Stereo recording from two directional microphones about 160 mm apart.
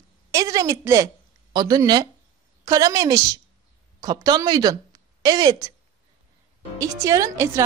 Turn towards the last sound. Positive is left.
turn(degrees=-20)  # may be behind; listen again after turning